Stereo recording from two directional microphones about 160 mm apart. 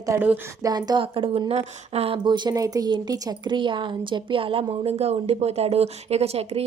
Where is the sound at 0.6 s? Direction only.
25° right (ahead or behind).